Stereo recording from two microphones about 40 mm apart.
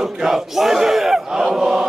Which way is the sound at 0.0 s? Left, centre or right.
Centre.